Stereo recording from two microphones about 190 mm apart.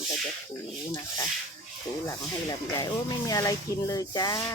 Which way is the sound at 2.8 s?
20° left (ahead or behind).